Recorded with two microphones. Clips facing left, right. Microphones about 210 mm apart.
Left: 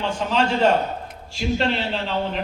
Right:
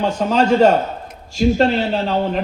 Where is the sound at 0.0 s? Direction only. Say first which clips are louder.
Right 5 dB; 40° right (ahead or behind).